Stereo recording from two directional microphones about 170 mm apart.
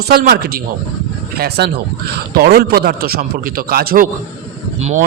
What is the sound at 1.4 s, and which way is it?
A man's voice, 75° right (ahead or behind).